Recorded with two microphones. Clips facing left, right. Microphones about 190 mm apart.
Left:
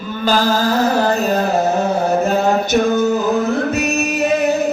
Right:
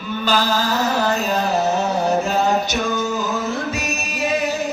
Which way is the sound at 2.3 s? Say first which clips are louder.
Left 4 dB; 55° left (ahead or behind).